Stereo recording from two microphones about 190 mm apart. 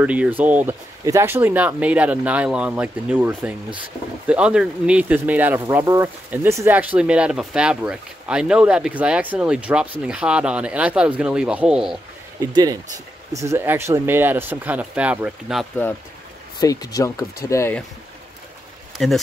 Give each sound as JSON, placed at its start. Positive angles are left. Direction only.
{"t": 0.0, "sound": "speech", "side_deg": -5}
{"t": 12.9, "sound": "speech", "side_deg": -15}
{"t": 16.5, "sound": "speech", "side_deg": 20}
{"t": 19.0, "sound": "speech", "side_deg": 0}